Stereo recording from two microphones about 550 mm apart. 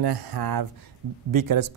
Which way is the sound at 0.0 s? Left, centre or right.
Right.